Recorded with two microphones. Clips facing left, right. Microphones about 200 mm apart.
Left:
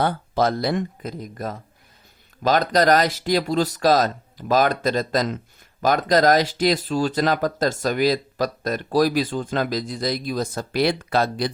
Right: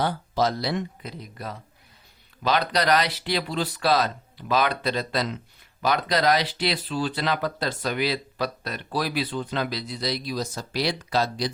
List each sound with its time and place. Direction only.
0.0 s speech: 55° left (ahead or behind)